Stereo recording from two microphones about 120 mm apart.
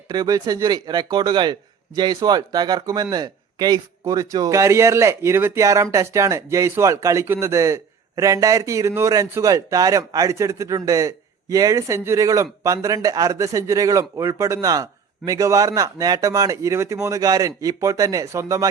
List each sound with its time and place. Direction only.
0.1 s speech: 30° right (ahead or behind)